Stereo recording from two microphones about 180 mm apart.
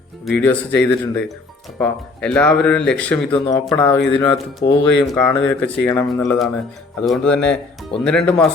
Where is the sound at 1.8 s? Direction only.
5° left (ahead or behind).